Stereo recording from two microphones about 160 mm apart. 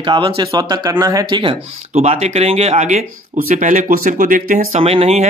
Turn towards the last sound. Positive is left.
turn(degrees=-40)  # may be behind; listen again after turning